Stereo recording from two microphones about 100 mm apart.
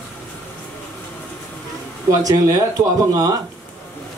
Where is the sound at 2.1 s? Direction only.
35° right (ahead or behind).